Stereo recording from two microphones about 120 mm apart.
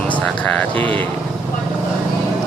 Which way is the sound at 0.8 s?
45° right (ahead or behind).